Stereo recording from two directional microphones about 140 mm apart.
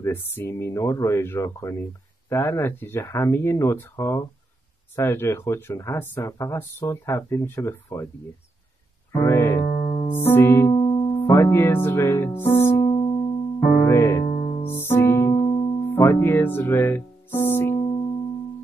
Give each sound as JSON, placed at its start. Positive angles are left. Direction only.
{"t": 0.0, "sound": "speech", "side_deg": 15}
{"t": 9.2, "sound": "music", "side_deg": 20}
{"t": 10.7, "sound": "music", "side_deg": 35}
{"t": 11.1, "sound": "music", "side_deg": 20}
{"t": 12.8, "sound": "music", "side_deg": 30}
{"t": 13.7, "sound": "music", "side_deg": 20}
{"t": 15.3, "sound": "music", "side_deg": 35}
{"t": 16.0, "sound": "music", "side_deg": 15}
{"t": 17.7, "sound": "music", "side_deg": 35}